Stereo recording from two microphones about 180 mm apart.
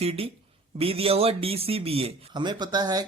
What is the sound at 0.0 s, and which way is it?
A man's voice, 35° right (ahead or behind).